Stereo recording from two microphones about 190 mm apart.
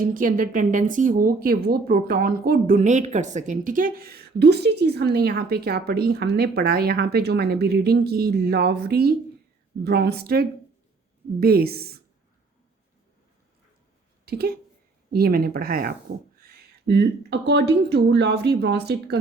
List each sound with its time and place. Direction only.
0.0 s speech: 45° right (ahead or behind)
14.3 s speech: 55° right (ahead or behind)